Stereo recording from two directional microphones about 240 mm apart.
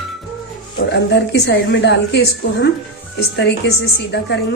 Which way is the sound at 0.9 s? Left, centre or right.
Left.